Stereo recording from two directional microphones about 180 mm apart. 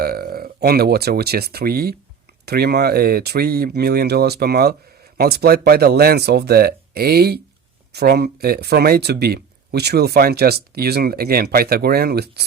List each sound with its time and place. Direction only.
0.0 s speech: 55° right (ahead or behind)